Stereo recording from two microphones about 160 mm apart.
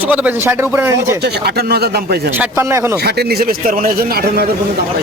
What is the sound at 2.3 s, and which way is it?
Speech, 15° right (ahead or behind).